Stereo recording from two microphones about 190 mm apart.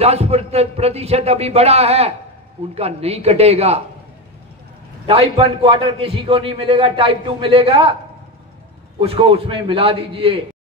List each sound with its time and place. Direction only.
0.0 s speech: 35° right (ahead or behind)
5.0 s a man's voice: 30° right (ahead or behind)
9.0 s a man's voice: 30° right (ahead or behind)